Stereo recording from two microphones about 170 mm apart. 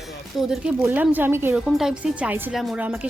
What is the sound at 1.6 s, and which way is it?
Speech, centre (ahead or behind).